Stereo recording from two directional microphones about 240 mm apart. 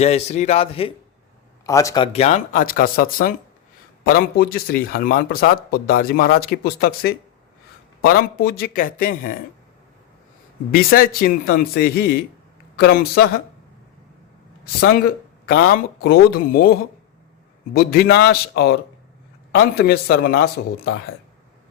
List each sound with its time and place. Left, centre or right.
0.0 s a man's voice: left
2.1 s a man's voice: left
10.7 s a man's voice: left
14.8 s a man's voice: left
17.7 s a man's voice: left